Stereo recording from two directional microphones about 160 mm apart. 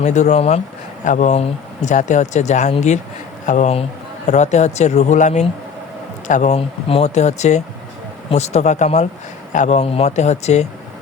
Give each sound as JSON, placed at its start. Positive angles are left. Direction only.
{"t": 0.0, "sound": "speech", "side_deg": 45}